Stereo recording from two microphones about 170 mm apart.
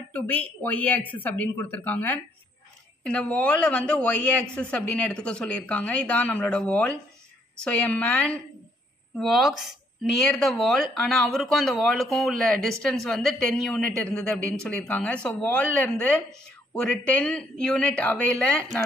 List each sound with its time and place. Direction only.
0.1 s speech: 10° left (ahead or behind)